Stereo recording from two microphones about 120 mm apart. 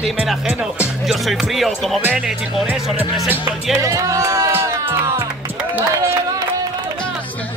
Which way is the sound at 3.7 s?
25° right (ahead or behind).